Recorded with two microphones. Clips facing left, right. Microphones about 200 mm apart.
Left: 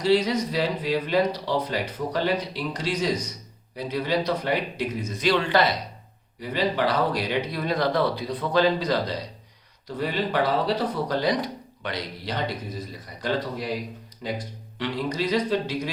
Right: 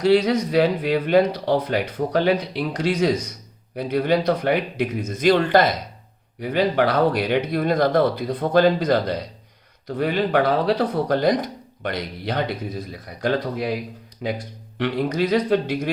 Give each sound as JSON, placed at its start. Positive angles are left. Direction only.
{"t": 0.0, "sound": "speech", "side_deg": -60}
{"t": 6.4, "sound": "speech", "side_deg": -60}